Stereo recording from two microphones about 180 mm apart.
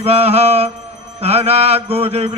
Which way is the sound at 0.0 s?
35° right (ahead or behind).